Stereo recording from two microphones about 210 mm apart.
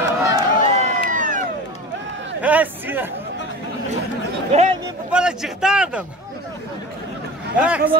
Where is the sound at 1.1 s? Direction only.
40° right (ahead or behind).